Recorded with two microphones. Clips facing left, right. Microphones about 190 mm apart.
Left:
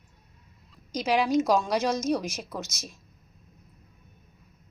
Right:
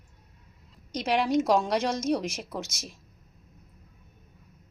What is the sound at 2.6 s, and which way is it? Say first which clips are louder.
Speech: right 1 dB; 30° right (ahead or behind).